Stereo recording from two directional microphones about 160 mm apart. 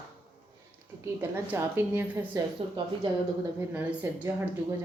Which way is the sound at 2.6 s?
35° right (ahead or behind).